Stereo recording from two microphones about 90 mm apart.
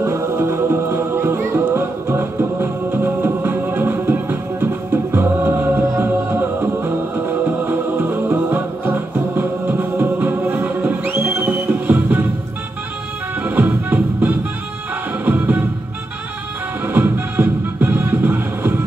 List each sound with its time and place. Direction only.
0.0 s music: 30° right (ahead or behind)
13.4 s music: 20° right (ahead or behind)
16.8 s music: 25° right (ahead or behind)